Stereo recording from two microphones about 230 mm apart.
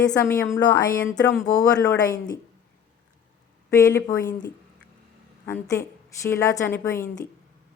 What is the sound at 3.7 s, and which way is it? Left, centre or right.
Speech, centre.